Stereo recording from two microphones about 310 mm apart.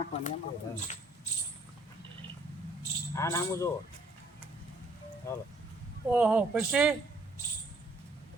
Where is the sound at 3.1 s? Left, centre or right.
Centre.